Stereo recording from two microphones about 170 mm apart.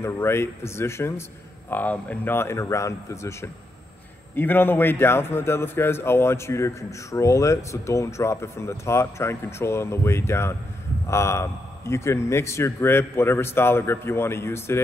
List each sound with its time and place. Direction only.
0.0 s a man's voice: 15° left (ahead or behind)